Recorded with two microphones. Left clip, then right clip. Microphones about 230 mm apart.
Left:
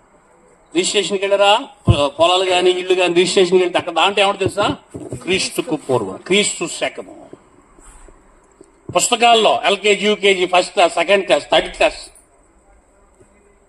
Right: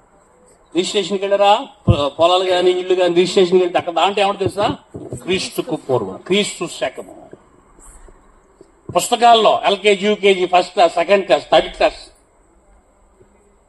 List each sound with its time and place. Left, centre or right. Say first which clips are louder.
0.7 s a man's voice: left 1 dB; left
8.9 s a man's voice: right 1 dB; left